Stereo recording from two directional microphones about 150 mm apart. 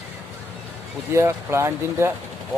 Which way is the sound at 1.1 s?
15° right (ahead or behind).